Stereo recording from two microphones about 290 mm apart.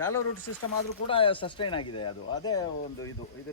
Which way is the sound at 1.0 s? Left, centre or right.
Centre.